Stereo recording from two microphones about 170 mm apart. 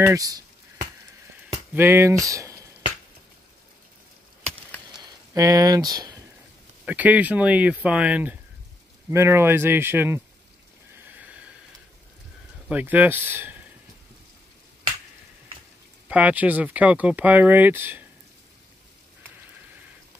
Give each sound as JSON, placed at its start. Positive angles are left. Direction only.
{"t": 0.1, "sound": "speech", "side_deg": -20}
{"t": 1.7, "sound": "speech", "side_deg": -15}
{"t": 4.4, "sound": "chop", "side_deg": 5}
{"t": 4.9, "sound": "a sound", "side_deg": -20}
{"t": 6.9, "sound": "speech", "side_deg": -10}
{"t": 11.1, "sound": "a sound", "side_deg": -10}
{"t": 12.6, "sound": "speech", "side_deg": -10}
{"t": 16.1, "sound": "speech", "side_deg": -10}